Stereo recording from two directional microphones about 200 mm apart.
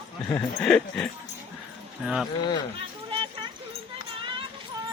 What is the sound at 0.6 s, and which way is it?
Speech, 5° left (ahead or behind).